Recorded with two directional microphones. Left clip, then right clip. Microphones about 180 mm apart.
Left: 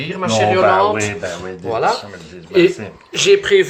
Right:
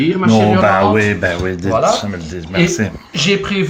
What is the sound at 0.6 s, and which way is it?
Speech, 15° right (ahead or behind).